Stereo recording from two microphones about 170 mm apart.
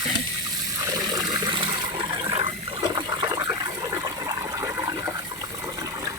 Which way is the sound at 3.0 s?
25° right (ahead or behind).